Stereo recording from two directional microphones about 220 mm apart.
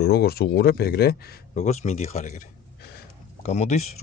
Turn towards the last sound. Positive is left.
turn(degrees=30)  # may be behind; listen again after turning